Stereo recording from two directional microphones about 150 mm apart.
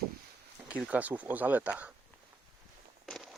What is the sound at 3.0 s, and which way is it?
Walk, centre (ahead or behind).